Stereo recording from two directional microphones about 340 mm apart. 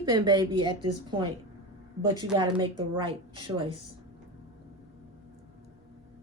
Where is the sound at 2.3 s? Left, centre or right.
Centre.